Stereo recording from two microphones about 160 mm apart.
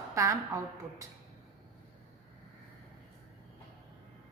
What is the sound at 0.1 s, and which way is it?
Speech, 20° right (ahead or behind).